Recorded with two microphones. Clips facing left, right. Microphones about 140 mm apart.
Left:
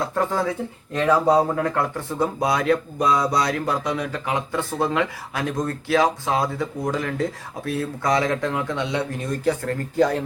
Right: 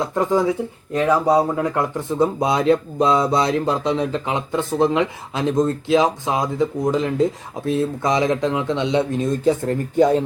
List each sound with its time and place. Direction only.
0.0 s speech: 15° right (ahead or behind)